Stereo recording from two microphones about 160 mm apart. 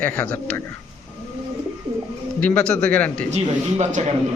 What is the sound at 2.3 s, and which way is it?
Speech, 5° left (ahead or behind).